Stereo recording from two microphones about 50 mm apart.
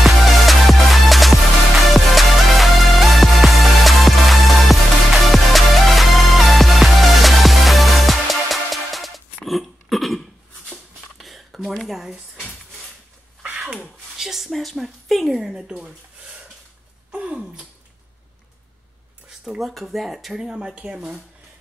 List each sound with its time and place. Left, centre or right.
0.0 s music: centre
11.1 s a sound: centre
14.1 s speech: centre
15.6 s a sound: centre
19.4 s speech: centre
20.4 s speech: right